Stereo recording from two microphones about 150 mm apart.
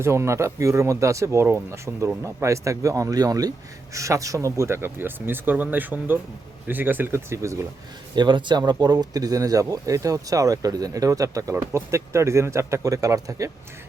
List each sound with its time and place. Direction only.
0.0 s speech: 20° right (ahead or behind)
8.1 s speech: 30° right (ahead or behind)